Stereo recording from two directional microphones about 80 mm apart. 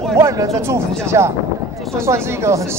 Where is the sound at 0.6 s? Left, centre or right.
Right.